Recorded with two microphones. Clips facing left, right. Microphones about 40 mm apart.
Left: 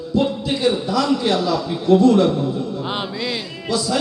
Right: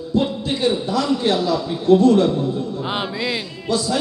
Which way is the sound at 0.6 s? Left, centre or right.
Left.